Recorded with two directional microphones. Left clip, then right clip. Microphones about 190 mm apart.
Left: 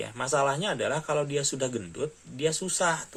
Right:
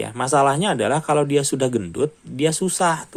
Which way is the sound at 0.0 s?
50° right (ahead or behind).